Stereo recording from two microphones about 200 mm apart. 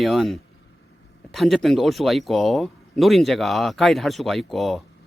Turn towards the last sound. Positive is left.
turn(degrees=0)  # may be behind; listen again after turning